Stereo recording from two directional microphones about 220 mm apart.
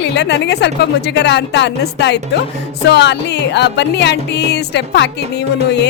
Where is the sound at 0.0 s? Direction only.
50° left (ahead or behind).